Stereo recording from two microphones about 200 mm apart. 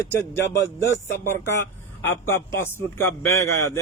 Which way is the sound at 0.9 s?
15° left (ahead or behind).